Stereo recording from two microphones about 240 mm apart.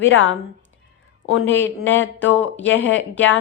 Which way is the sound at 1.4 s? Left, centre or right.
Centre.